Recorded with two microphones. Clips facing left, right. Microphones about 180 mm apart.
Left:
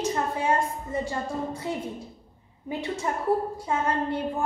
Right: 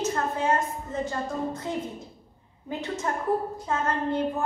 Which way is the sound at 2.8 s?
10° left (ahead or behind).